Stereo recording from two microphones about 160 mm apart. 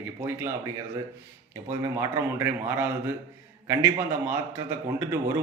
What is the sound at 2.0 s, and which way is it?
Speech, 15° right (ahead or behind).